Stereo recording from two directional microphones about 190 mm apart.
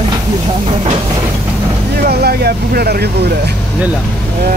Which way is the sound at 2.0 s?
55° right (ahead or behind).